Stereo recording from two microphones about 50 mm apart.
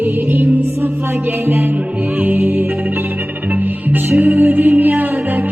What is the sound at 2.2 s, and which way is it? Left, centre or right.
Music, right.